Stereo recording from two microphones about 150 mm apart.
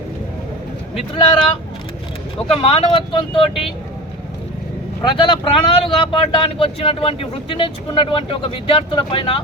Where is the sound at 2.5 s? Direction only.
40° left (ahead or behind).